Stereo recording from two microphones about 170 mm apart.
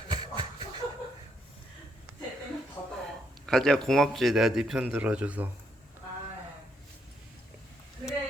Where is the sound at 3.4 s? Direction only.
5° left (ahead or behind).